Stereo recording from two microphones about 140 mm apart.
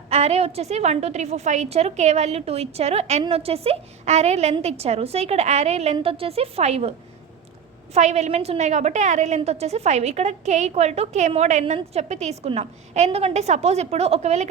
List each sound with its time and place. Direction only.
0.1 s a woman's voice: 50° right (ahead or behind)
7.9 s a woman's voice: 55° right (ahead or behind)